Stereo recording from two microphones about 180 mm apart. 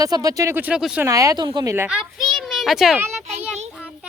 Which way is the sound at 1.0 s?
20° right (ahead or behind).